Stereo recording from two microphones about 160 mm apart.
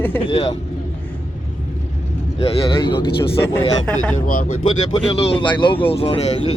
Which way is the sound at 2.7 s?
30° left (ahead or behind).